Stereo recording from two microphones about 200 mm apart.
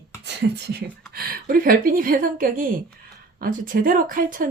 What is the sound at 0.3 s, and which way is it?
A woman's voice, 55° right (ahead or behind).